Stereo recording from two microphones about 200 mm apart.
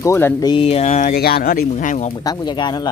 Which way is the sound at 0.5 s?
30° left (ahead or behind).